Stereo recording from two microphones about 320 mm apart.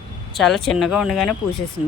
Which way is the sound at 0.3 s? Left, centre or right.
Centre.